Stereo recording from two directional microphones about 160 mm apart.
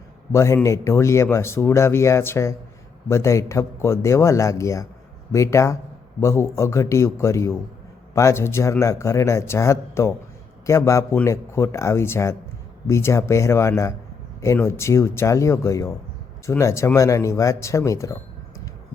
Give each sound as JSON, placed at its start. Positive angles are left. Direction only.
{"t": 0.3, "sound": "speech", "side_deg": 20}